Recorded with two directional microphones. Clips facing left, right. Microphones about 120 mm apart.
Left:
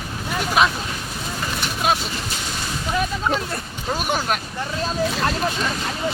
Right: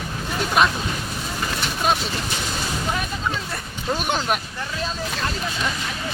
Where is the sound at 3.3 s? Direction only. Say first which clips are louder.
Left 4 dB; 45° left (ahead or behind).